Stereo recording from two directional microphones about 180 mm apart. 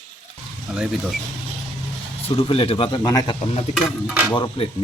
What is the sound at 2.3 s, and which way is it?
Speech, 30° left (ahead or behind).